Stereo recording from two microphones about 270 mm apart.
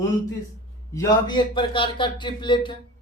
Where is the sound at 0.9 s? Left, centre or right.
Centre.